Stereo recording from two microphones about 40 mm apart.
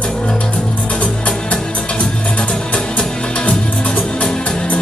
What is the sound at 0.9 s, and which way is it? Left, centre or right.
Music, left.